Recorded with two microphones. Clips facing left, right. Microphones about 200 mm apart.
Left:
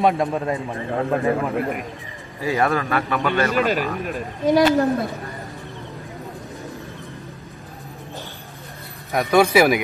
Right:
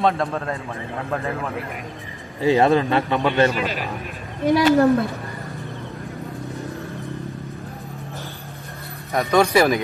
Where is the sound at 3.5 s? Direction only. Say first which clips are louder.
Left 6 dB; 50° left (ahead or behind).